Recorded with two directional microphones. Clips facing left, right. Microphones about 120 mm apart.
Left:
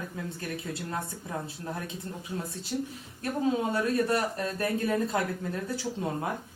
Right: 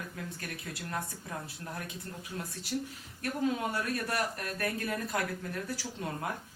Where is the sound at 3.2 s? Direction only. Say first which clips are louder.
Left 4 dB; 25° left (ahead or behind).